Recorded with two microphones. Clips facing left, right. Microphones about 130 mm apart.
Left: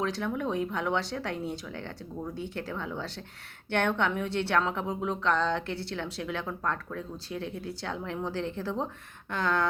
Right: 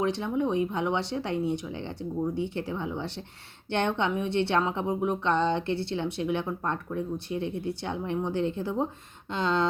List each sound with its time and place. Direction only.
0.0 s speech: 20° right (ahead or behind)